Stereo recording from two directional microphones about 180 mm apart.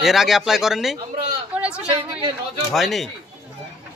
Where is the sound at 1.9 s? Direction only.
30° right (ahead or behind).